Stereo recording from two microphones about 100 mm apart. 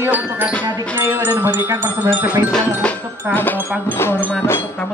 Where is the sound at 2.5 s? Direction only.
10° left (ahead or behind).